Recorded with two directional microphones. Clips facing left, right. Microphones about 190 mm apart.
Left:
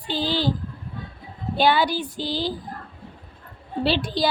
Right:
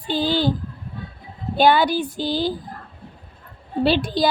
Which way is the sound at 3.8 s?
50° right (ahead or behind).